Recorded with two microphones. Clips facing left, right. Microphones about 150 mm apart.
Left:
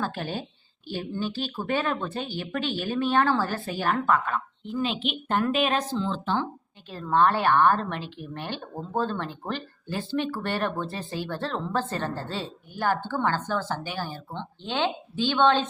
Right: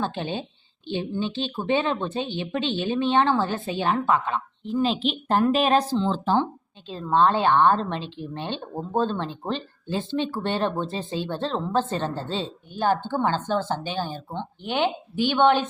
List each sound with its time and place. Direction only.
0.0 s a woman's voice: 20° right (ahead or behind)
4.7 s speech: 35° right (ahead or behind)
6.4 s a woman's voice: 20° right (ahead or behind)